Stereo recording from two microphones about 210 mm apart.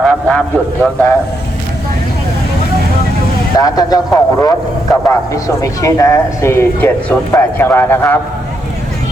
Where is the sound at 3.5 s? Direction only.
20° left (ahead or behind).